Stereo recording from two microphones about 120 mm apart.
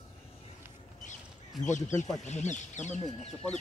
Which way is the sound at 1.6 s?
90° left.